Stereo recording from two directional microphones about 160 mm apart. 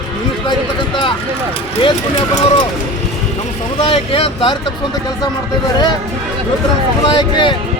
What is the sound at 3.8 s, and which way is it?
Speech, 35° left (ahead or behind).